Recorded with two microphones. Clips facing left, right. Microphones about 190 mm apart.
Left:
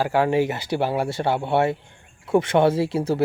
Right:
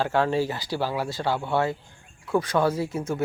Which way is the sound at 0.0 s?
10° left (ahead or behind).